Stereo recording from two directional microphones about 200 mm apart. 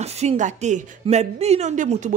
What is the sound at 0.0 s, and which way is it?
Speech, 35° right (ahead or behind).